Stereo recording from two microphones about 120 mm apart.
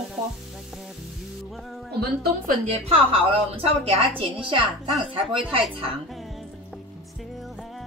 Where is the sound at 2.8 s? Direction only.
55° right (ahead or behind).